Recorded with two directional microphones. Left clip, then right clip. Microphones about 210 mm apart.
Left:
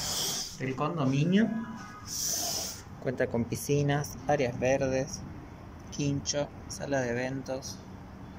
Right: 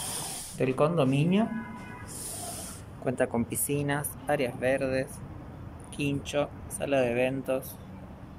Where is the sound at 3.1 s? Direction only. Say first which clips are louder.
Right 2 dB; 5° right (ahead or behind).